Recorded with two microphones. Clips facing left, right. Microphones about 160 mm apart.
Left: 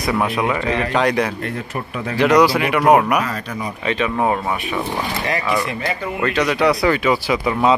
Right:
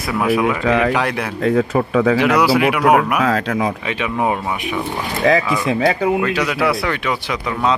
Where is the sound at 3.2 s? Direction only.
90° right.